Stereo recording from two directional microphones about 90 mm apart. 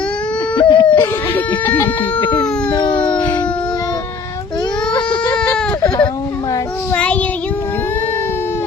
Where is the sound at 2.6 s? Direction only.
55° left (ahead or behind).